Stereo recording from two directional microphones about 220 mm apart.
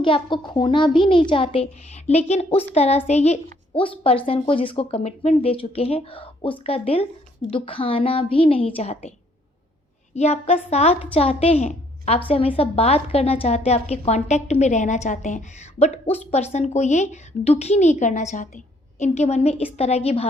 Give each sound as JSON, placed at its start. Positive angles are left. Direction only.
{"t": 0.0, "sound": "a woman's voice", "side_deg": 20}
{"t": 10.2, "sound": "a woman's voice", "side_deg": 30}